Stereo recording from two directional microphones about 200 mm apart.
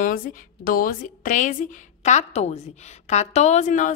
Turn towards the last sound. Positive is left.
turn(degrees=40)  # may be behind; listen again after turning